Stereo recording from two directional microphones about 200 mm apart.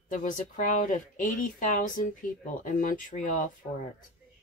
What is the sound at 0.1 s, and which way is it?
Speech, 40° left (ahead or behind).